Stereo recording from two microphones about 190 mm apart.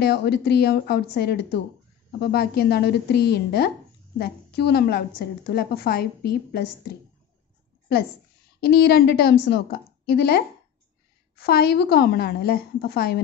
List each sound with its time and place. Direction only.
0.0 s a woman's voice: 55° left (ahead or behind)
8.6 s a woman's voice: 55° left (ahead or behind)